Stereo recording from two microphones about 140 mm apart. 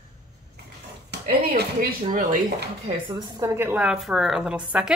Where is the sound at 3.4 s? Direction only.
15° right (ahead or behind).